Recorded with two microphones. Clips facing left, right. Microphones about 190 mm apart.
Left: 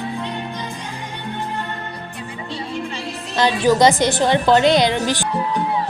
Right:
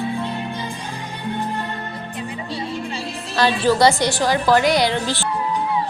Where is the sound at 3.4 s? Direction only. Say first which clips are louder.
Left 1 dB; 15° left (ahead or behind).